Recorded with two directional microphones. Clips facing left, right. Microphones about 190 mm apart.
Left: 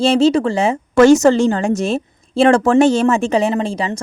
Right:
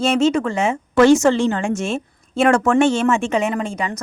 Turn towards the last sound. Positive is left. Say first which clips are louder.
# left 4 dB
turn(degrees=30)  # may be behind; listen again after turning